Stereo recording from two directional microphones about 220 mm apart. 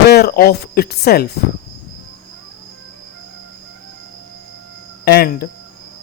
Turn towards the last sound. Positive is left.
turn(degrees=45)  # may be behind; listen again after turning